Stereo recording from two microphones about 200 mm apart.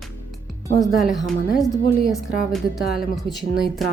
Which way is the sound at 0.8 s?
Centre (ahead or behind).